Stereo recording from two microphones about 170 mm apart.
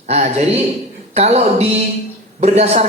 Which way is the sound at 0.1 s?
40° right (ahead or behind).